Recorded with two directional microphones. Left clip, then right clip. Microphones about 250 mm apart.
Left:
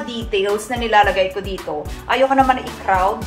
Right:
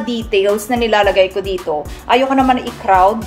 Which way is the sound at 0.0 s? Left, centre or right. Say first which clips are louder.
Right 5 dB; right.